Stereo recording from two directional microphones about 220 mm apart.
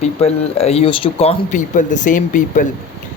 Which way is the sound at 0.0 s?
30° left (ahead or behind).